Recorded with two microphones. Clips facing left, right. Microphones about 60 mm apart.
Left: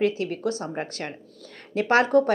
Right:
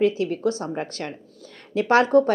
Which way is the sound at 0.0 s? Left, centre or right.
Left.